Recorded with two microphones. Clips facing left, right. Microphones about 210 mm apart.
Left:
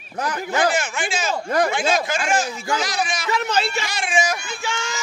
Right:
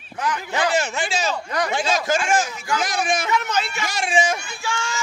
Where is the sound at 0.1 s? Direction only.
40° left (ahead or behind).